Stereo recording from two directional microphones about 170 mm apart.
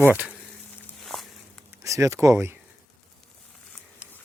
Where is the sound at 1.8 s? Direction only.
20° right (ahead or behind).